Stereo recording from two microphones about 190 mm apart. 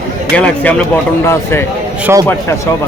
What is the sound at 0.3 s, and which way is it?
Speech, 5° left (ahead or behind).